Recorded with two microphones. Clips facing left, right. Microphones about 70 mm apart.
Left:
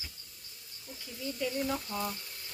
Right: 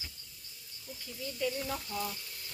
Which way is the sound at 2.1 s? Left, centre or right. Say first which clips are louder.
Left 1 dB; left.